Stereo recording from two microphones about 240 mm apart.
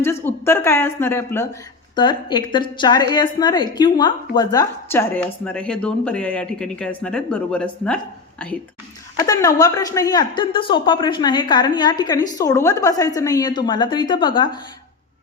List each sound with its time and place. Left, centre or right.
0.0 s a woman's voice: centre
9.1 s a woman's voice: centre